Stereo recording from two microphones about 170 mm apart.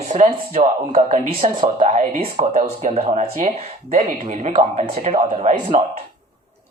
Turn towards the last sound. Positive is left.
turn(degrees=-40)  # may be behind; listen again after turning